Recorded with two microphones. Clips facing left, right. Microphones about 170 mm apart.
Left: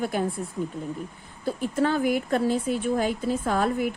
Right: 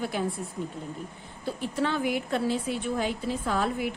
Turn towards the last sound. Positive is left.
turn(degrees=45)  # may be behind; listen again after turning